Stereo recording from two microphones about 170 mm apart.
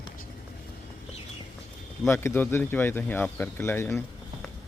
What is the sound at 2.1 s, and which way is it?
Speech, 15° left (ahead or behind).